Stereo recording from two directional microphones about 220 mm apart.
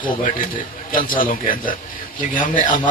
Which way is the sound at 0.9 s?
40° left (ahead or behind).